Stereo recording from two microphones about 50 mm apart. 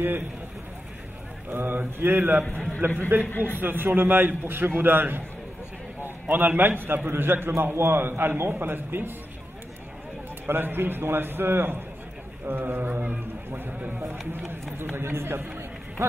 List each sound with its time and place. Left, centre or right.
1.5 s a man's voice: right
3.3 s a man's voice: left
3.5 s a man's voice: right
6.3 s a man's voice: right
10.4 s a man's voice: right
14.5 s a man's voice: right